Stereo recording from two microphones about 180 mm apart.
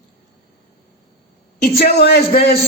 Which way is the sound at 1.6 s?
60° left (ahead or behind).